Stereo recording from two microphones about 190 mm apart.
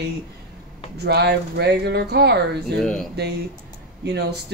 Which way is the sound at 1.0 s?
60° right (ahead or behind).